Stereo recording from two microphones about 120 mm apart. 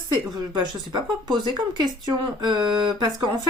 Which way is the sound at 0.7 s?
40° right (ahead or behind).